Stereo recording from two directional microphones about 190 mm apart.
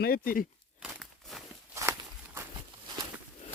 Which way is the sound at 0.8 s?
Centre (ahead or behind).